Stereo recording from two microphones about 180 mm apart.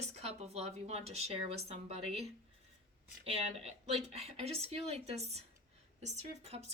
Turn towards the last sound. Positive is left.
turn(degrees=-35)  # may be behind; listen again after turning